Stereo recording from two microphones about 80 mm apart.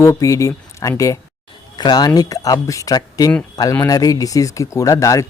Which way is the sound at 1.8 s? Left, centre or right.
Left.